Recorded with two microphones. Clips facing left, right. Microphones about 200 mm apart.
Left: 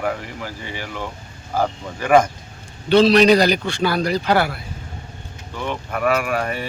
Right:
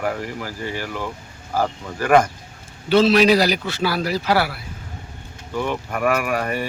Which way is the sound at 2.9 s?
5° right (ahead or behind).